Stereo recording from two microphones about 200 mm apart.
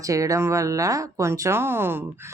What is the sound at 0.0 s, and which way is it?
Speech, 15° right (ahead or behind).